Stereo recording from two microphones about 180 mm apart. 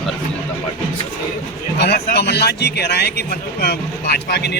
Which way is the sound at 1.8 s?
65° left (ahead or behind).